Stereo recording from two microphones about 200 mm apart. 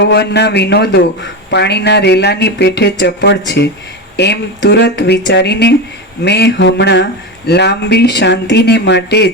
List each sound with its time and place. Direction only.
0.0 s a man's voice: 55° left (ahead or behind)